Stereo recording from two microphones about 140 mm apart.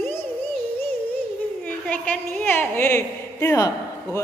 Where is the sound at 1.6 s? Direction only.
10° left (ahead or behind).